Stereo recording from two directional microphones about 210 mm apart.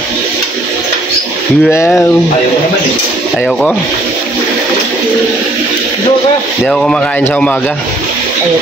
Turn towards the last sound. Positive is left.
turn(degrees=5)  # may be behind; listen again after turning